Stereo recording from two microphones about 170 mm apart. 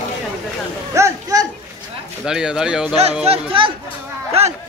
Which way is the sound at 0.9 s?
20° right (ahead or behind).